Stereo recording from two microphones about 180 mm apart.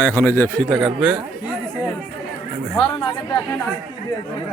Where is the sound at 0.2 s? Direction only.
10° left (ahead or behind).